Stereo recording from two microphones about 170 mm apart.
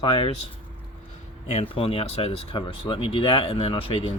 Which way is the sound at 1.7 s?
35° left (ahead or behind).